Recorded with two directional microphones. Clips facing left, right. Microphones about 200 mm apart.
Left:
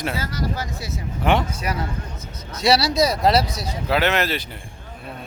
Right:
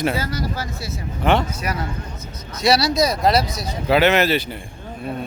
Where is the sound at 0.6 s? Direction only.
15° left (ahead or behind).